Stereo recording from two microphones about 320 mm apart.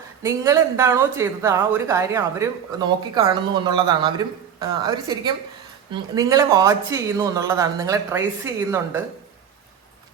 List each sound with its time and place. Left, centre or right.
0.2 s speech: centre